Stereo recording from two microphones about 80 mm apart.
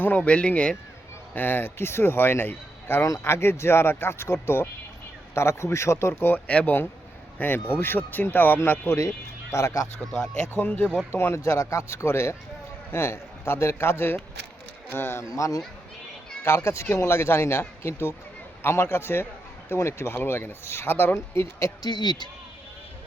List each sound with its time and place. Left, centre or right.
0.0 s speech: centre
1.4 s a man's voice: left
9.0 s speech: left
10.5 s a man's voice: left
21.8 s speech: left